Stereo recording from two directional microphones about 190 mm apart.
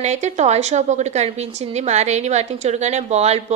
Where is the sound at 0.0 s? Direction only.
35° right (ahead or behind).